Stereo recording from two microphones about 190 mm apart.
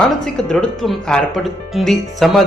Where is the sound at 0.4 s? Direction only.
Centre (ahead or behind).